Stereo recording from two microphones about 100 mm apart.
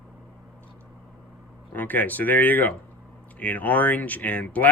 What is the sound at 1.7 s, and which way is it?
Speech, 15° left (ahead or behind).